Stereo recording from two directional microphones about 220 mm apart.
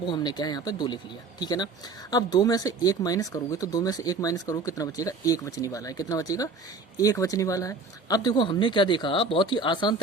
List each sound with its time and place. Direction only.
0.0 s speech: 20° left (ahead or behind)